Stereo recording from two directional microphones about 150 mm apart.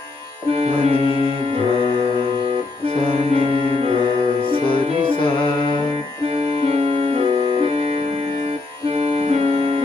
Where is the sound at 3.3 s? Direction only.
40° right (ahead or behind).